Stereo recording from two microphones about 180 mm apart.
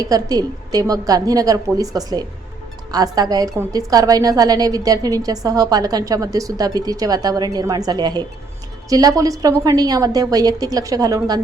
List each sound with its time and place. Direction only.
0.0 s a woman's voice: 20° right (ahead or behind)